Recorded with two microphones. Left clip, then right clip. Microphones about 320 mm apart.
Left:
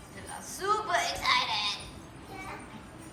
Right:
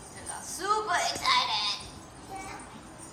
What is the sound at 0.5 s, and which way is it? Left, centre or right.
A woman's voice, centre.